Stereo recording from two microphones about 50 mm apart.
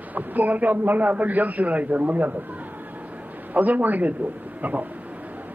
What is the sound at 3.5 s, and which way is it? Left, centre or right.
A man's voice, right.